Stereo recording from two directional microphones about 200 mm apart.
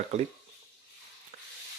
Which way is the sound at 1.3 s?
45° right (ahead or behind).